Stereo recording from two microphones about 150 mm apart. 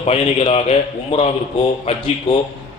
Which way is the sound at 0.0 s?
45° left (ahead or behind).